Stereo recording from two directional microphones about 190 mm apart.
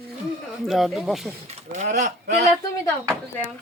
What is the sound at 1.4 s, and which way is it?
Speech, 40° right (ahead or behind).